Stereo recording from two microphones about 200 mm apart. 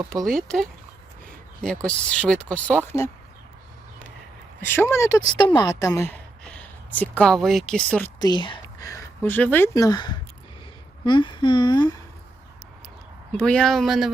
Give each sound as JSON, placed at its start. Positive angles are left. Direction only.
{"t": 0.3, "sound": "speech", "side_deg": 0}
{"t": 4.6, "sound": "a woman's voice", "side_deg": 10}
{"t": 8.2, "sound": "a woman's voice", "side_deg": 20}
{"t": 13.3, "sound": "speech", "side_deg": 5}